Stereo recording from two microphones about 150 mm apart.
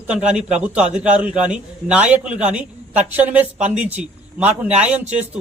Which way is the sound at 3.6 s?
50° right (ahead or behind).